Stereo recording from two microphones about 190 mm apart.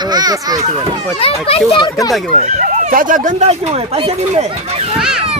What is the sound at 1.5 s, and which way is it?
Speech, 30° left (ahead or behind).